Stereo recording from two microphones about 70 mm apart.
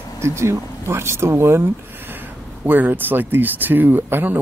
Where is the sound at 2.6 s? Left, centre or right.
Right.